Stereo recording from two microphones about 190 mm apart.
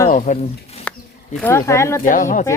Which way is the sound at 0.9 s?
5° left (ahead or behind).